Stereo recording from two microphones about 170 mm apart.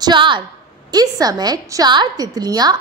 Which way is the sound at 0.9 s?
20° right (ahead or behind).